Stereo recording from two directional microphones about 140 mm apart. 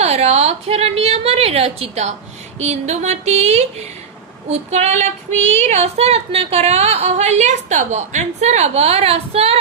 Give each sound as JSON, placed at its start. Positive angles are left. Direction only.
{"t": 0.0, "sound": "female singing", "side_deg": -50}